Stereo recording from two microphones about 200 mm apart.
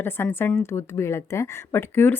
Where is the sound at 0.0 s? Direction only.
10° left (ahead or behind).